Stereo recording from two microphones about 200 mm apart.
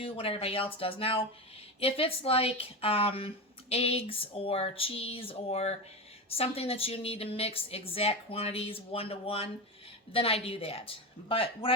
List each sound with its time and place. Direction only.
0.0 s speech: 30° left (ahead or behind)